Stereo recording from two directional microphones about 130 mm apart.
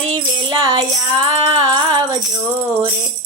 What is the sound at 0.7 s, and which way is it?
Music, 45° right (ahead or behind).